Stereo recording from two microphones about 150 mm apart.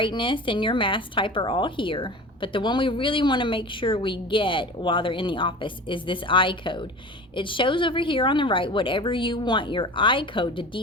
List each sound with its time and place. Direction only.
0.0 s speech: 35° left (ahead or behind)